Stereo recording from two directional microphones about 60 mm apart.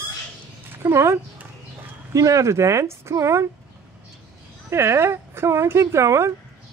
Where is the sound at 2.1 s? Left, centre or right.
Right.